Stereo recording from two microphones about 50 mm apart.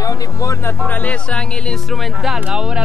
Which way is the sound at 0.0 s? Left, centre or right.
Left.